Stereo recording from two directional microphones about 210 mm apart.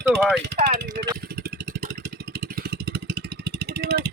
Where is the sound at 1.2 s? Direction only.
50° right (ahead or behind).